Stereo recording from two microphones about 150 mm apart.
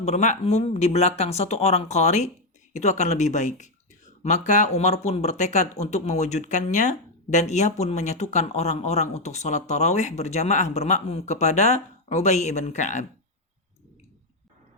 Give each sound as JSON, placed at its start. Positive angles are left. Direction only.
{"t": 0.0, "sound": "speech", "side_deg": 50}